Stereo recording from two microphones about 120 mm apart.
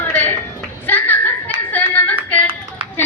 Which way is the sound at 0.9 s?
15° left (ahead or behind).